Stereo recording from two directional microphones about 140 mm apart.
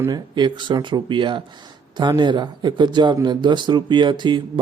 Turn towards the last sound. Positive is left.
turn(degrees=-35)  # may be behind; listen again after turning